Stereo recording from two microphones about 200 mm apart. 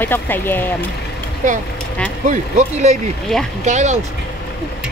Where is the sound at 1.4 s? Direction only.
40° right (ahead or behind).